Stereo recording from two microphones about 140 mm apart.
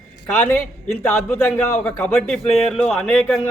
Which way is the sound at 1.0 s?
15° left (ahead or behind).